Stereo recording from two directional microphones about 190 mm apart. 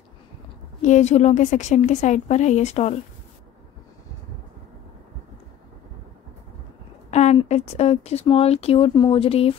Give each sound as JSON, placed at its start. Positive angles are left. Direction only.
{"t": 0.8, "sound": "speech", "side_deg": 40}
{"t": 7.1, "sound": "speech", "side_deg": 35}